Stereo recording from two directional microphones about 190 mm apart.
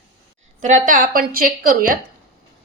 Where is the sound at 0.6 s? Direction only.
40° right (ahead or behind).